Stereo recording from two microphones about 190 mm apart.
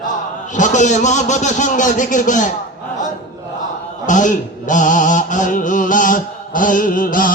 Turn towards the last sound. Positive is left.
turn(degrees=45)  # may be behind; listen again after turning